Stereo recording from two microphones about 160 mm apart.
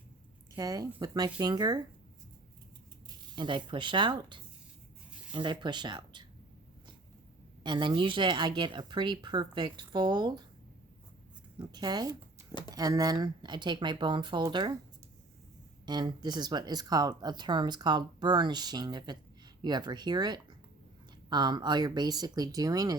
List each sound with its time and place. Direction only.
0.5 s speech: 25° right (ahead or behind)
3.3 s speech: 30° right (ahead or behind)
7.6 s speech: 30° right (ahead or behind)
11.5 s speech: 25° right (ahead or behind)
12.5 s a sound: 25° left (ahead or behind)
12.7 s speech: 25° right (ahead or behind)
15.9 s speech: 25° right (ahead or behind)